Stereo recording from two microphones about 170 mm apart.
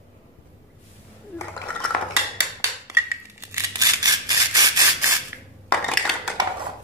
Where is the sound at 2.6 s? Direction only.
15° right (ahead or behind).